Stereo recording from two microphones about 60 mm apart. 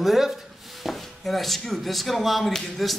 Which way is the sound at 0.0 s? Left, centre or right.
Centre.